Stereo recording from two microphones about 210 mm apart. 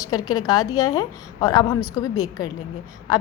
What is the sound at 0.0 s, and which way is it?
A woman's voice, 15° left (ahead or behind).